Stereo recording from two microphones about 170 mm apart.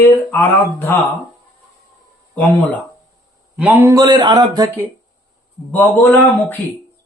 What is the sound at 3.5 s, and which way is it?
Speech, 10° right (ahead or behind).